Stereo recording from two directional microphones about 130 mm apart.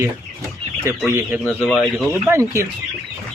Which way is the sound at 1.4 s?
10° left (ahead or behind).